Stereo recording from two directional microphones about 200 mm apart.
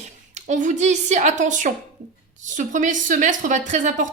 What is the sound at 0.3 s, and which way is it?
Speech, 35° right (ahead or behind).